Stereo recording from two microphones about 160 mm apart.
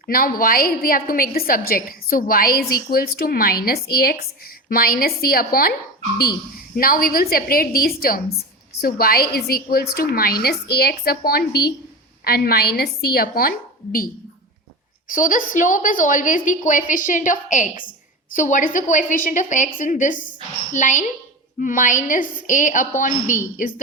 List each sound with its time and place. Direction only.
0.1 s a woman's voice: 65° left (ahead or behind)
6.7 s a woman's voice: 65° left (ahead or behind)
15.1 s a woman's voice: 55° left (ahead or behind)